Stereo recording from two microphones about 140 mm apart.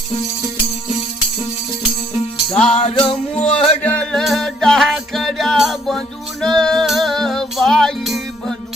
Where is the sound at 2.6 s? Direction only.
50° left (ahead or behind).